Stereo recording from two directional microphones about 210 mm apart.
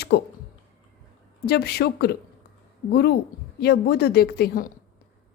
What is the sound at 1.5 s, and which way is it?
A woman's voice, 50° left (ahead or behind).